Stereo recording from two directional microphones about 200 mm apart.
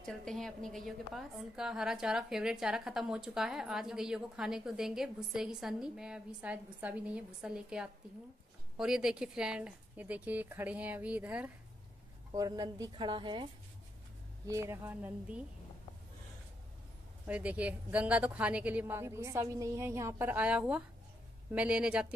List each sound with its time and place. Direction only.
0.0 s a woman's voice: 5° left (ahead or behind)
12.3 s speech: 20° right (ahead or behind)
17.3 s a woman's voice: 5° right (ahead or behind)